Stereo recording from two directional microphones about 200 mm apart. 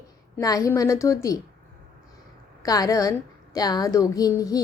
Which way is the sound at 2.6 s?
20° left (ahead or behind).